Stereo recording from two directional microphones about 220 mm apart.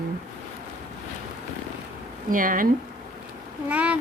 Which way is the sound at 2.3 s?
40° right (ahead or behind).